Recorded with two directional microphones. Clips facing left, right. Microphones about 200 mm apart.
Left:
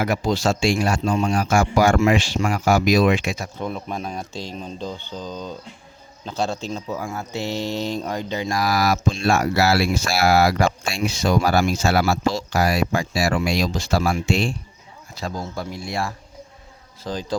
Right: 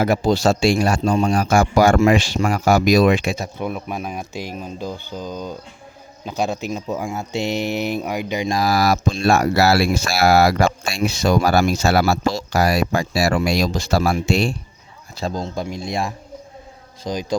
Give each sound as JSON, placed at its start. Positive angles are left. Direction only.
{"t": 0.0, "sound": "speech", "side_deg": -30}
{"t": 3.4, "sound": "speech", "side_deg": -10}
{"t": 15.1, "sound": "speech", "side_deg": -25}